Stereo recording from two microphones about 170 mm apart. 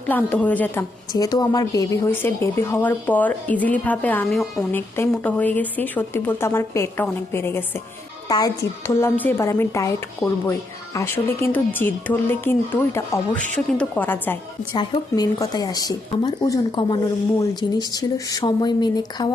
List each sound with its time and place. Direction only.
0.1 s speech: 10° left (ahead or behind)
1.1 s a woman's voice: 20° left (ahead or behind)
14.7 s a woman's voice: 25° left (ahead or behind)